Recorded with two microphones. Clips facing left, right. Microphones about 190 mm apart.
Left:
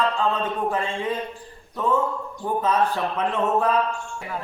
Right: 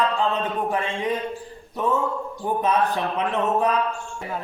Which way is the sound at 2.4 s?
20° right (ahead or behind).